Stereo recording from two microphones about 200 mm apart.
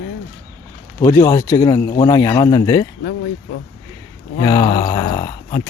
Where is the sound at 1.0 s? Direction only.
15° left (ahead or behind).